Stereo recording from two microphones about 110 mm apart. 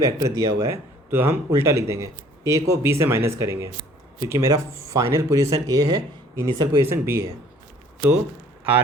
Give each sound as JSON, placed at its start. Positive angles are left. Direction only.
{"t": 0.0, "sound": "speech", "side_deg": -30}
{"t": 6.8, "sound": "speech", "side_deg": -25}